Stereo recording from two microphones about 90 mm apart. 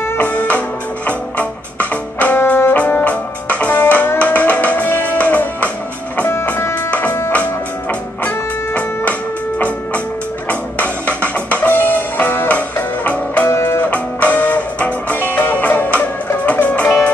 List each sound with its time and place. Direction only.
0.0 s music: 20° left (ahead or behind)
11.1 s music: 15° left (ahead or behind)
13.5 s music: 30° left (ahead or behind)